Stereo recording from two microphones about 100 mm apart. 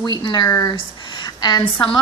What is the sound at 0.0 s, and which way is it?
Speech, 45° left (ahead or behind).